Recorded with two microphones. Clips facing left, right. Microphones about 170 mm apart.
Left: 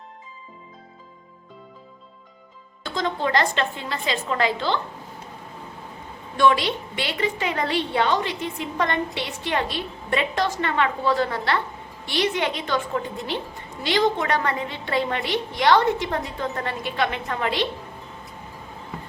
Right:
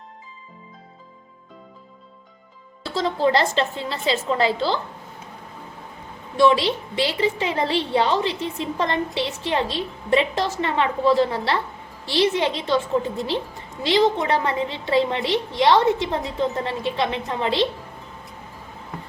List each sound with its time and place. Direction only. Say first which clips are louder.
2.8 s a woman's voice: right 4 dB; 30° right (ahead or behind)
6.3 s a woman's voice: right 2 dB; 30° right (ahead or behind)